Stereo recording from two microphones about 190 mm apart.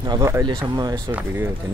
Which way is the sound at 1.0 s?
10° right (ahead or behind).